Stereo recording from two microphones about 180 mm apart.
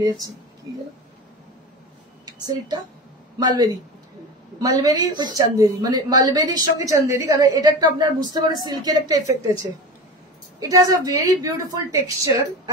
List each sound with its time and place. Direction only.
2.2 s a woman's voice: 20° right (ahead or behind)